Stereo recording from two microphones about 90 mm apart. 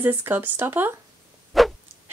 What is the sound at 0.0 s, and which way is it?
Speech, 20° right (ahead or behind).